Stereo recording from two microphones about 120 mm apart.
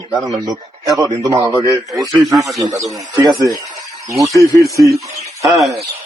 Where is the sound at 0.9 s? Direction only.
30° right (ahead or behind).